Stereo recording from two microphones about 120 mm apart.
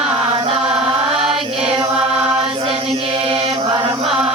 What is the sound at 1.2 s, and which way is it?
Chant, 55° right (ahead or behind).